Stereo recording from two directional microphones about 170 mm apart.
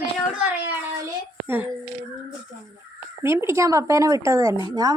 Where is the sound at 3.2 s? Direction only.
15° right (ahead or behind).